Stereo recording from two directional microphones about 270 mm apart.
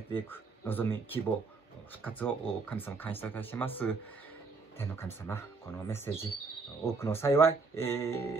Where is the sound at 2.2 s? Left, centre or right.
Centre.